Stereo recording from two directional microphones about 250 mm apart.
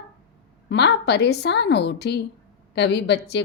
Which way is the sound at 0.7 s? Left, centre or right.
Left.